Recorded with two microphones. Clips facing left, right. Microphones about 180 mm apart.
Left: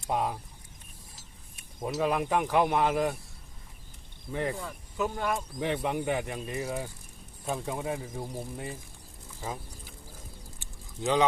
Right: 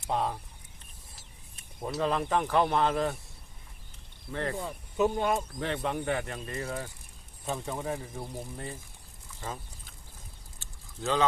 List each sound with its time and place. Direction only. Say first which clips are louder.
0.1 s speech: left 1 dB; 10° left (ahead or behind)
2.0 s speech: left 1 dB; 10° left (ahead or behind)
4.3 s speech: left 2 dB; 15° left (ahead or behind)
4.5 s speech: right 4 dB; 20° right (ahead or behind)
5.5 s speech: left 2 dB; 15° left (ahead or behind)
10.6 s a sound: left 3 dB; 15° left (ahead or behind)